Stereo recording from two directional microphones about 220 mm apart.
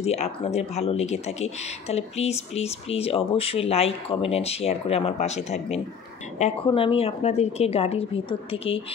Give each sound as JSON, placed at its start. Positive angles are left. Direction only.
{"t": 0.0, "sound": "speech", "side_deg": 30}